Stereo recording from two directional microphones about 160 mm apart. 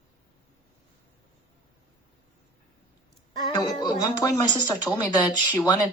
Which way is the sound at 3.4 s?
25° left (ahead or behind).